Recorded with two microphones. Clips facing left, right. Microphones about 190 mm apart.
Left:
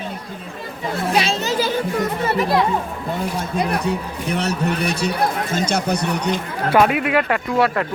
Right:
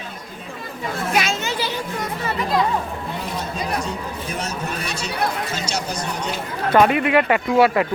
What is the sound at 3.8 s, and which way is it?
A man's voice, 65° left (ahead or behind).